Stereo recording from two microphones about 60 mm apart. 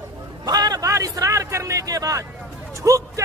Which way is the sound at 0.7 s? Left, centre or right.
Right.